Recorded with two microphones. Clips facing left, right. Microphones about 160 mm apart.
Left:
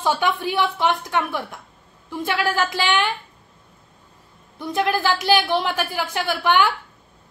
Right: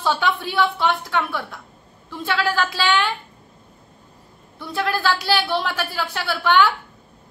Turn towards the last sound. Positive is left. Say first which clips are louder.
# right 1 dB
turn(degrees=15)  # may be behind; listen again after turning